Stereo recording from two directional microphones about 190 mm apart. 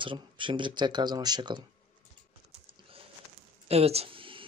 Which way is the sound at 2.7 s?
30° right (ahead or behind).